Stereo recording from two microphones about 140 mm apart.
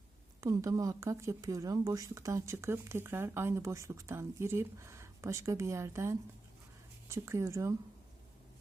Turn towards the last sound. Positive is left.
turn(degrees=-20)  # may be behind; listen again after turning